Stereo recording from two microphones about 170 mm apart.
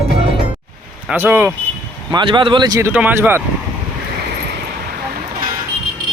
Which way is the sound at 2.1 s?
30° right (ahead or behind).